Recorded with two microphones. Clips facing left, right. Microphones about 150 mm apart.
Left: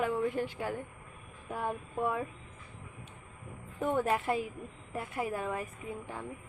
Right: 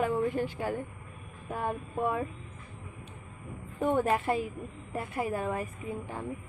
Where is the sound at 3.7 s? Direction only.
5° right (ahead or behind).